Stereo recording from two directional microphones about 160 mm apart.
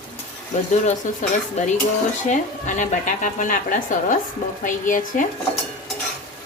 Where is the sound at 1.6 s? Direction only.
45° left (ahead or behind).